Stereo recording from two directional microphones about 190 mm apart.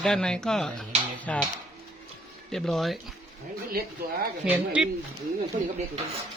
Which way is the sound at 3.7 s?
50° right (ahead or behind).